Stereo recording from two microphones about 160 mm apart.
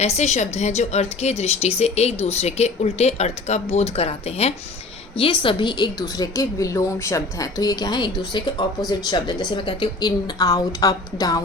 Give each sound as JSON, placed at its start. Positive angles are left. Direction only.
{"t": 0.0, "sound": "a woman's voice", "side_deg": 45}